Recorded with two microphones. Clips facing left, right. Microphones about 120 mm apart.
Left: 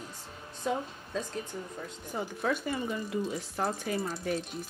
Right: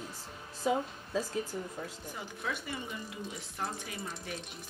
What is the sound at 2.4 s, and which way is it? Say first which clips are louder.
Speech: left 7 dB; 45° left (ahead or behind).